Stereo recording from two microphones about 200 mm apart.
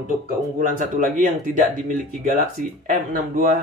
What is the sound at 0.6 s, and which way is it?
Speech, 40° right (ahead or behind).